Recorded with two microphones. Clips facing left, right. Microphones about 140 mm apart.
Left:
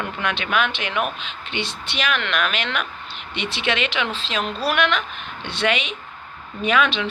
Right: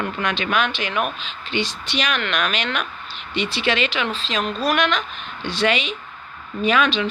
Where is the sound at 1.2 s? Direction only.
60° left (ahead or behind).